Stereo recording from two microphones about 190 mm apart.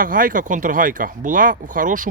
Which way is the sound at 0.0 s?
45° right (ahead or behind).